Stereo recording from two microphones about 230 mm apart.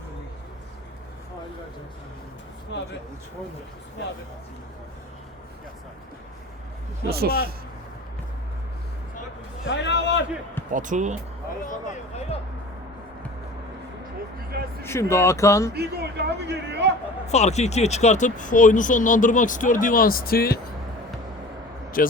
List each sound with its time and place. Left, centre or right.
2.7 s a man's voice: left
7.1 s a man's voice: right
9.6 s a man's voice: left
10.7 s speech: right
14.5 s a man's voice: right
15.1 s speech: centre
15.7 s a man's voice: right
17.2 s speech: left
22.0 s speech: left